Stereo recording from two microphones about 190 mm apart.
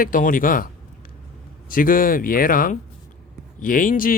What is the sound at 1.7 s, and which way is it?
Speech, 45° left (ahead or behind).